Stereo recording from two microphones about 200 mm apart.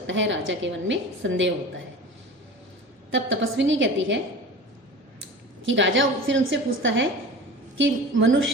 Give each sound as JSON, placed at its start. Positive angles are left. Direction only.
{"t": 0.1, "sound": "a woman's voice", "side_deg": -70}
{"t": 3.1, "sound": "a woman's voice", "side_deg": -70}
{"t": 5.6, "sound": "a woman's voice", "side_deg": -70}